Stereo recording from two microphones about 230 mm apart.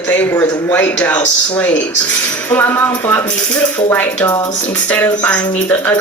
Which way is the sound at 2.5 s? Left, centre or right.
Centre.